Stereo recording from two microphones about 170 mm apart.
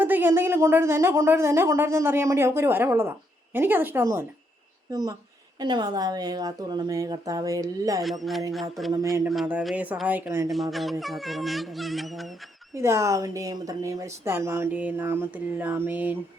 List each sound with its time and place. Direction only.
0.0 s a woman's voice: 10° right (ahead or behind)
9.3 s a woman's voice: 5° right (ahead or behind)
10.5 s speech: centre (ahead or behind)
12.7 s a woman's voice: 15° right (ahead or behind)